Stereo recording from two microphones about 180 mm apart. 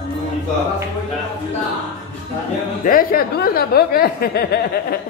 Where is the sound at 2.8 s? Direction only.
50° left (ahead or behind).